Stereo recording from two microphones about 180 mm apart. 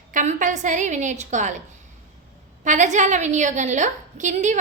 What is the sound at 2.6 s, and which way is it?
A woman's voice, 40° right (ahead or behind).